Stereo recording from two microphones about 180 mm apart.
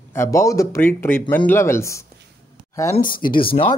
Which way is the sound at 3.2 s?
55° left (ahead or behind).